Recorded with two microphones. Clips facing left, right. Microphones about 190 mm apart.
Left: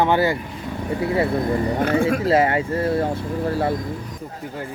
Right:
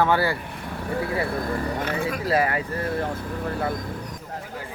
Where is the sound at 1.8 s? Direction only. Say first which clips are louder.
Left 8 dB; 50° left (ahead or behind).